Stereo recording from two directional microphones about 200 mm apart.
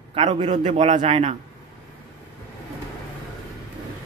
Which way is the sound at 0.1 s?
30° right (ahead or behind).